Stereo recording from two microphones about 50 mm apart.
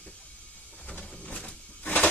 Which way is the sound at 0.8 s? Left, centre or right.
Left.